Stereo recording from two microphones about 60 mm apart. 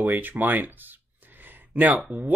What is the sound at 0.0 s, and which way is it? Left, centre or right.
Speech, right.